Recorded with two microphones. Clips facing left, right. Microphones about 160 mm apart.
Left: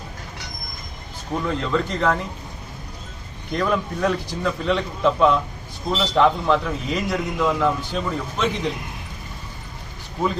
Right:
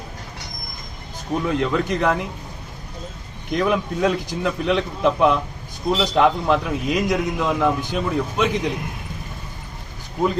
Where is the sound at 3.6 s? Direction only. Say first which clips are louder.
Right 2 dB; 15° right (ahead or behind).